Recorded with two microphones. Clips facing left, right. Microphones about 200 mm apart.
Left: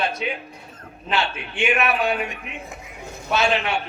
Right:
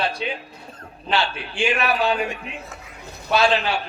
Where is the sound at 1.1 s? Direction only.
30° right (ahead or behind).